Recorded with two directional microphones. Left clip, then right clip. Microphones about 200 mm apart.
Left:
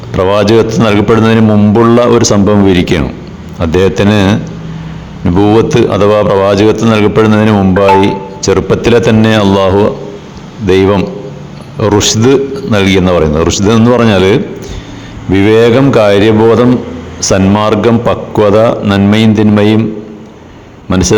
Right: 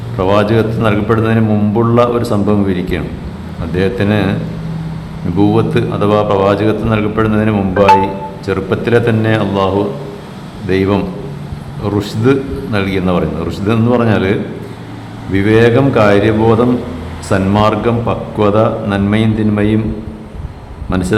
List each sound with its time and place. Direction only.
0.2 s speech: 40° left (ahead or behind)
5.4 s speech: 35° left (ahead or behind)
10.7 s speech: 40° left (ahead or behind)
20.9 s speech: 35° left (ahead or behind)